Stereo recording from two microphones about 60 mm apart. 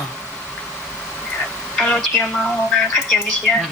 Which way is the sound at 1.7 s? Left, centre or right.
Centre.